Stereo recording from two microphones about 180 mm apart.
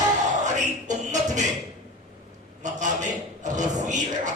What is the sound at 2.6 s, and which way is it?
A man's voice, 45° right (ahead or behind).